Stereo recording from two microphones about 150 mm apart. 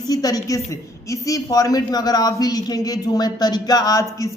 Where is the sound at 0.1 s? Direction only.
25° left (ahead or behind).